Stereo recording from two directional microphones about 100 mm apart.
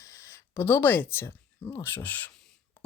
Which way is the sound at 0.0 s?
30° left (ahead or behind).